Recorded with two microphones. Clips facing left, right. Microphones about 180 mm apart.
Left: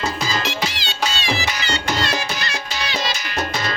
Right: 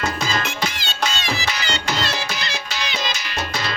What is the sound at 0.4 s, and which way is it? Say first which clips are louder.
Music: left 1 dB; 50° right (ahead or behind).